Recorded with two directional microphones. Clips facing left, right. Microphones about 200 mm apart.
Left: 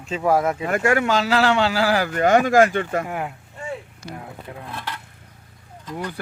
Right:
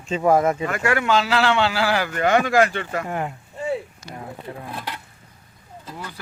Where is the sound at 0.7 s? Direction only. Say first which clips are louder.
Left 1 dB; 45° left (ahead or behind).